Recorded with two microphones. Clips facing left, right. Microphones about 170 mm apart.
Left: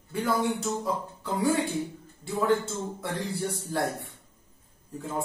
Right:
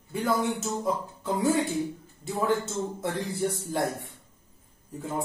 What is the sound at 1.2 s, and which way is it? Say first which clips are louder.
Speech: right 1 dB; 20° right (ahead or behind).